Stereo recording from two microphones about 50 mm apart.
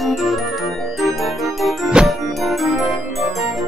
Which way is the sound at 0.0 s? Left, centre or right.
Centre.